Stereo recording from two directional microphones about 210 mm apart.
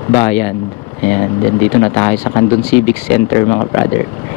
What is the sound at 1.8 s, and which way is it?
Speech, 20° left (ahead or behind).